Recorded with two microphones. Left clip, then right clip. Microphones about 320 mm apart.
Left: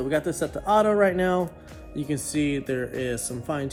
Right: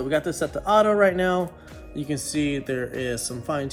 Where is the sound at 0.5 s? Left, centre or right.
Right.